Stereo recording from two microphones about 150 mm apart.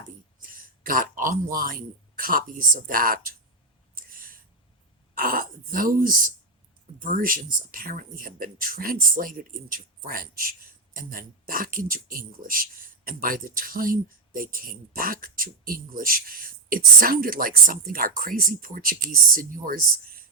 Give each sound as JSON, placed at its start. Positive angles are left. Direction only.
{"t": 0.4, "sound": "speech", "side_deg": -70}
{"t": 3.9, "sound": "a sound", "side_deg": -70}
{"t": 5.1, "sound": "speech", "side_deg": -75}